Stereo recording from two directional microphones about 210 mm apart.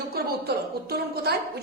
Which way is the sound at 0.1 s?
50° right (ahead or behind).